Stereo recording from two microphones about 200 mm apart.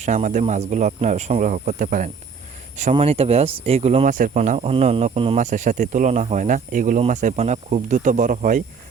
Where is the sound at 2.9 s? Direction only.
30° right (ahead or behind).